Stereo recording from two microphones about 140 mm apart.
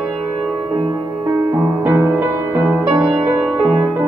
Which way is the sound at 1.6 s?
15° right (ahead or behind).